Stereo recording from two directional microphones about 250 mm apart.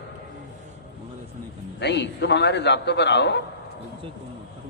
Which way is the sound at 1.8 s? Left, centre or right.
Left.